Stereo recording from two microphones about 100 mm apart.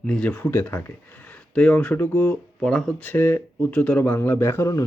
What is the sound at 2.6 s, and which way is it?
Speech, 5° left (ahead or behind).